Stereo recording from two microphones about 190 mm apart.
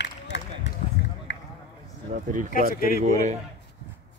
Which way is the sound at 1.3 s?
75° left (ahead or behind).